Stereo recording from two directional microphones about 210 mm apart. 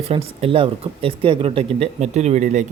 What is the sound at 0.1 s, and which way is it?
Speech, 25° right (ahead or behind).